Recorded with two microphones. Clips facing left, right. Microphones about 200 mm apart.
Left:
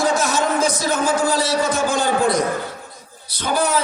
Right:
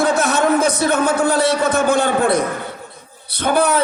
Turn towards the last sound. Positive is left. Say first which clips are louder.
# right 4 dB
turn(degrees=-60)  # may be behind; listen again after turning